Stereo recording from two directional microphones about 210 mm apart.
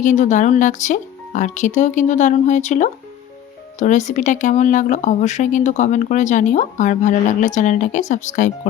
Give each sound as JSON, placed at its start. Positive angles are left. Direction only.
{"t": 0.0, "sound": "speech", "side_deg": 35}